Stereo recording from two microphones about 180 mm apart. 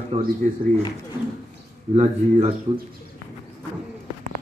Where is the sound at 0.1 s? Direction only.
30° right (ahead or behind).